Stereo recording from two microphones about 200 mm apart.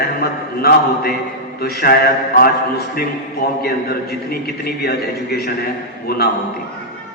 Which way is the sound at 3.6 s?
50° left (ahead or behind).